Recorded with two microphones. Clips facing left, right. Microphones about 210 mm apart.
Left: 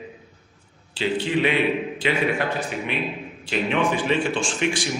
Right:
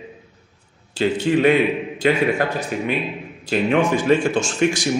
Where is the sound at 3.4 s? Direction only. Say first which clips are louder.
Right 5 dB; 40° right (ahead or behind).